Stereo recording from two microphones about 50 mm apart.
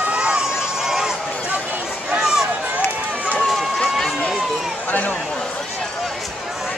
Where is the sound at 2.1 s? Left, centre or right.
Centre.